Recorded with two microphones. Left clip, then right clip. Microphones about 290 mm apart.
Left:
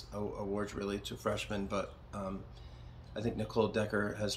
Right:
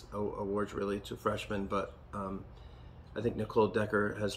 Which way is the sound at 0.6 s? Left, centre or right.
Centre.